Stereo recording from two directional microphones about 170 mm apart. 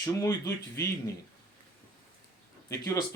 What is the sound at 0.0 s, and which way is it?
Speech, 15° left (ahead or behind).